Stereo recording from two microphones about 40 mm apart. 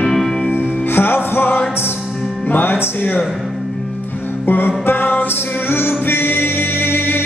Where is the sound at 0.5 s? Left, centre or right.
Left.